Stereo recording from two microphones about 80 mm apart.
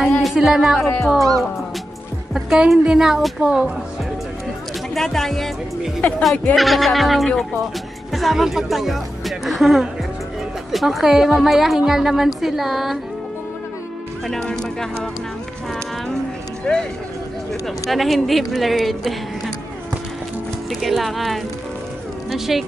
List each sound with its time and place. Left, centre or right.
0.2 s a woman's voice: centre
2.3 s a woman's voice: centre
4.9 s a woman's voice: centre
5.9 s speech: centre
6.5 s a woman's voice: centre
14.2 s speech: centre
16.7 s speech: centre
17.8 s a woman's voice: centre
20.8 s a woman's voice: centre